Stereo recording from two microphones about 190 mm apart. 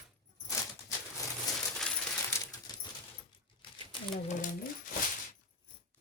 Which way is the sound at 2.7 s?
20° left (ahead or behind).